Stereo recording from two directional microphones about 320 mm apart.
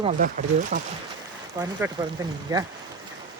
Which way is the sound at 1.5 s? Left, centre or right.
Centre.